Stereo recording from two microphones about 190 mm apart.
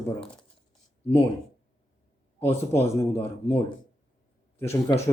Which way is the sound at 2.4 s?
10° left (ahead or behind).